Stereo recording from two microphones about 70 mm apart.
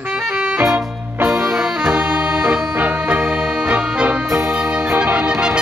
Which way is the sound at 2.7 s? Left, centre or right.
Right.